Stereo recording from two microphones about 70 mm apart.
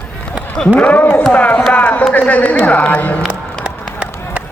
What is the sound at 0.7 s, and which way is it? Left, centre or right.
A man's voice, left.